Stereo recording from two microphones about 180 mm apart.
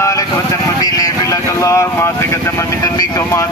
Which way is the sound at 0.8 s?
20° left (ahead or behind).